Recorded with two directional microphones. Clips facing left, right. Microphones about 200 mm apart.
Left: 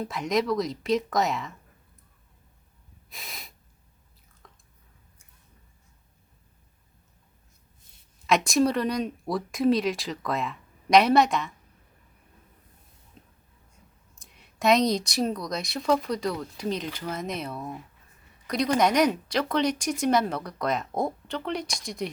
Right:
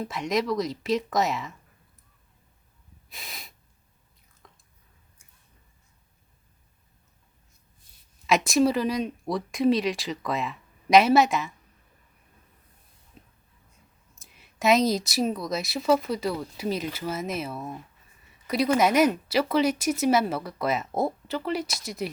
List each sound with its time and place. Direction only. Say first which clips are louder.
0.0 s speech: left 1 dB; centre (ahead or behind)
3.1 s snort: even; centre (ahead or behind)
4.4 s drip: even; centre (ahead or behind)
8.3 s speech: right 1 dB; centre (ahead or behind)
13.2 s a sound: right 1 dB; 5° right (ahead or behind)
14.2 s speech: even; centre (ahead or behind)